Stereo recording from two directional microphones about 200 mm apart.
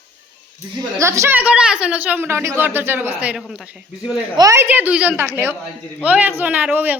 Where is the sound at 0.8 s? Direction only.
15° right (ahead or behind).